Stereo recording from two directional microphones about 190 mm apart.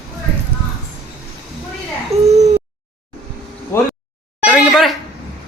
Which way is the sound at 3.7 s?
10° left (ahead or behind).